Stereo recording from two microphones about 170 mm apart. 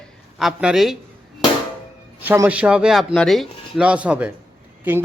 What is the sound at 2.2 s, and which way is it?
A man's voice, 10° right (ahead or behind).